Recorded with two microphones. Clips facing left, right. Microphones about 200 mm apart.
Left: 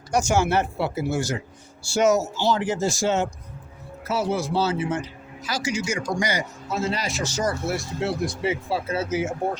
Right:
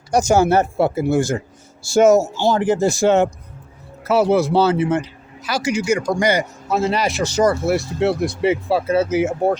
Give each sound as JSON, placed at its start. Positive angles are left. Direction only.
{"t": 0.1, "sound": "a man's voice", "side_deg": -40}